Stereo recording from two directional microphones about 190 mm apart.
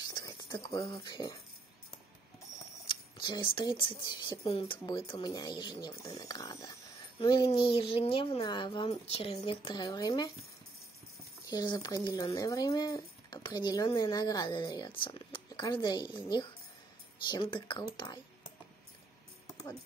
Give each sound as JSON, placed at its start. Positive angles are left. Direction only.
{"t": 0.0, "sound": "speech", "side_deg": 20}
{"t": 2.9, "sound": "speech", "side_deg": 25}
{"t": 11.5, "sound": "speech", "side_deg": 20}